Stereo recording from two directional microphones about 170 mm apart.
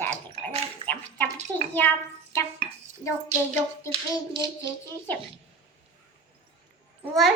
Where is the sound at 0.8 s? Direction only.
30° right (ahead or behind).